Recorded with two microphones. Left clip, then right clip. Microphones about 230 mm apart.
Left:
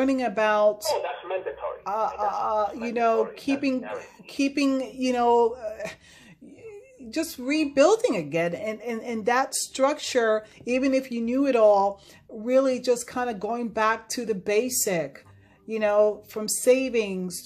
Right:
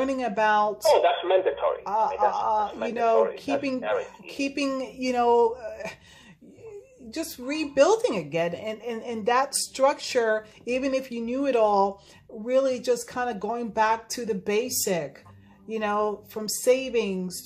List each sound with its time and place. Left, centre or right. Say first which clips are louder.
0.0 s speech: left 1 dB; left
0.9 s speech: right 8 dB; right
1.9 s speech: even; left
4.4 s speech: left 3 dB; left
7.1 s speech: left 4 dB; left